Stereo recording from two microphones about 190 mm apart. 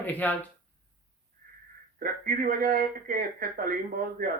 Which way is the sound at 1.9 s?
50° right (ahead or behind).